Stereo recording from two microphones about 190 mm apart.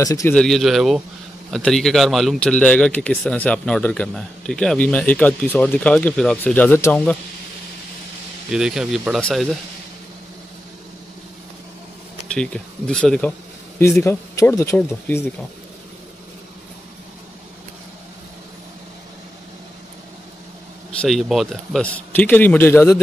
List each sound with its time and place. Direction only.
0.0 s a man's voice: 15° left (ahead or behind)
0.4 s a man's voice: centre (ahead or behind)
8.5 s a man's voice: 5° right (ahead or behind)
12.4 s a man's voice: 5° left (ahead or behind)
21.0 s a man's voice: centre (ahead or behind)